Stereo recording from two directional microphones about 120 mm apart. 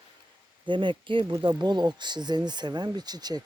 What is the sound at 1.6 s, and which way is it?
Mantra, 35° right (ahead or behind).